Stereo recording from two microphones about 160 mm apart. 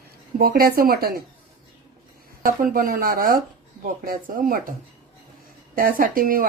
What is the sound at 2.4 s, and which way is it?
A woman's voice, 60° right (ahead or behind).